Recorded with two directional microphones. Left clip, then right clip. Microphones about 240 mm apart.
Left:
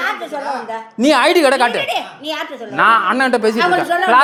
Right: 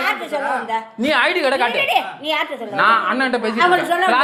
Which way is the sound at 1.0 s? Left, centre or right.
Left.